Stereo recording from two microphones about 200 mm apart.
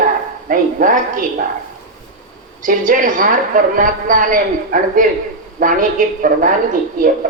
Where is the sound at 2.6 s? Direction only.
40° right (ahead or behind).